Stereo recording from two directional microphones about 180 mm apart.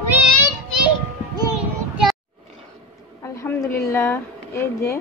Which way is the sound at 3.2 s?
15° left (ahead or behind).